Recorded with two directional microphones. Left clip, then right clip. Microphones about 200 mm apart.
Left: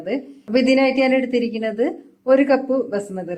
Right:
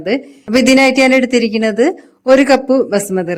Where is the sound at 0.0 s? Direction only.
55° right (ahead or behind).